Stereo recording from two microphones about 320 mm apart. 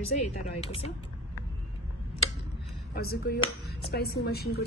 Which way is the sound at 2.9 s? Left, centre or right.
Left.